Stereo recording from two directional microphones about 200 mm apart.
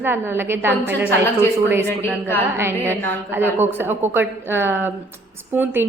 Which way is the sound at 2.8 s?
10° left (ahead or behind).